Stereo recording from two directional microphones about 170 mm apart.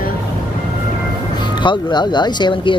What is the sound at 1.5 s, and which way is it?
Speech, 30° left (ahead or behind).